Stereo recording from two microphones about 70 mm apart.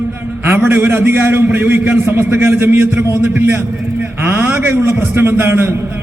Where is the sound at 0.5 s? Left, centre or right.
Right.